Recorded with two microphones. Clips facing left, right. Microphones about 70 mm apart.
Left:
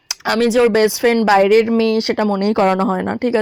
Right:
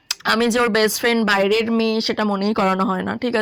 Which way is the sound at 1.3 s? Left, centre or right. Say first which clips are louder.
Left 6 dB; left.